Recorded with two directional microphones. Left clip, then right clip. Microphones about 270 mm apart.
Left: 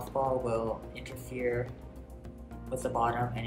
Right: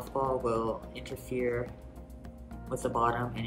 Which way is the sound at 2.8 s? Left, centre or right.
Centre.